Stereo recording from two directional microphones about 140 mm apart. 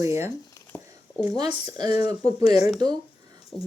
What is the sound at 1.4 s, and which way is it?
Speech, 30° right (ahead or behind).